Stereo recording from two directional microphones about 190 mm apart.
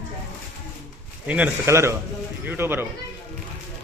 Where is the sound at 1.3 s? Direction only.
10° right (ahead or behind).